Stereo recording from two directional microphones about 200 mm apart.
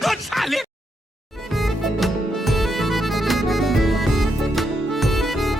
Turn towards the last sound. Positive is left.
turn(degrees=0)  # may be behind; listen again after turning